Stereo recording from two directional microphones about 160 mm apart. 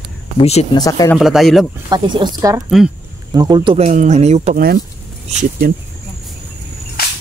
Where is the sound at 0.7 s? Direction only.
25° left (ahead or behind).